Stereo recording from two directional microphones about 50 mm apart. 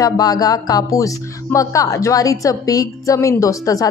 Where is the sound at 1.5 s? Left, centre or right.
Left.